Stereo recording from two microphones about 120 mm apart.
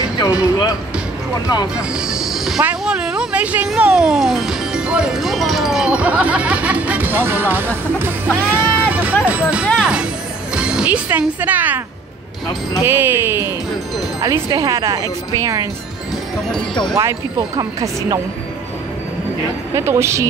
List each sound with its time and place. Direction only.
0.4 s music: 30° left (ahead or behind)
1.8 s speech: 5° right (ahead or behind)
9.8 s music: 5° right (ahead or behind)
11.1 s speech: 15° right (ahead or behind)
12.8 s speech: 15° right (ahead or behind)
14.2 s speech: 30° right (ahead or behind)
16.9 s speech: 25° right (ahead or behind)
19.7 s speech: 20° right (ahead or behind)